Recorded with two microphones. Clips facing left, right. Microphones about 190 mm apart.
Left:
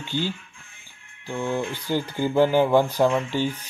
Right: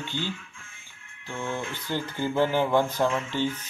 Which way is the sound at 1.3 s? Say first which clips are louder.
Left 6 dB; 35° left (ahead or behind).